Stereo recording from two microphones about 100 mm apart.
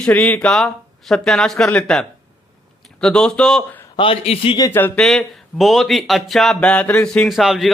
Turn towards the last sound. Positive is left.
turn(degrees=0)  # may be behind; listen again after turning